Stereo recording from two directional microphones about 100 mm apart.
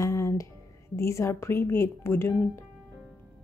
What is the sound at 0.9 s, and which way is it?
Speech, 30° left (ahead or behind).